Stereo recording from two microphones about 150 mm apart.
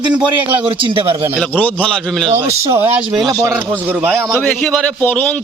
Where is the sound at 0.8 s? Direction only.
35° right (ahead or behind).